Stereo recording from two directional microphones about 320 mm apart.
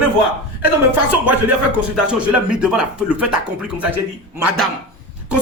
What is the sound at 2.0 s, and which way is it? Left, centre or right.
Speech, centre.